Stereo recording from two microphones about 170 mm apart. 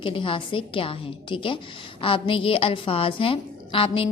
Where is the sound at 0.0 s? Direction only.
30° left (ahead or behind).